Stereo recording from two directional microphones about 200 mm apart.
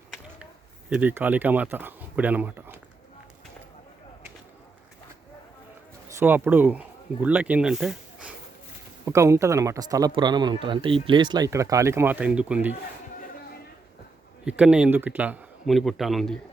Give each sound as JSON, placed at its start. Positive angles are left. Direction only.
{"t": 0.9, "sound": "speech", "side_deg": -10}
{"t": 6.1, "sound": "speech", "side_deg": -10}
{"t": 9.0, "sound": "speech", "side_deg": -15}
{"t": 14.4, "sound": "speech", "side_deg": -5}